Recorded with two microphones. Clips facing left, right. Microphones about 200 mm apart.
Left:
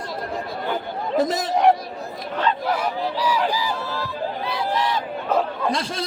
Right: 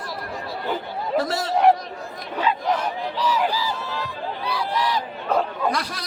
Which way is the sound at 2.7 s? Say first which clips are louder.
Left 2 dB; 10° left (ahead or behind).